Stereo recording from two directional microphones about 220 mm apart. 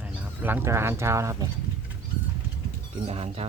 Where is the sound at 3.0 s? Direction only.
25° right (ahead or behind).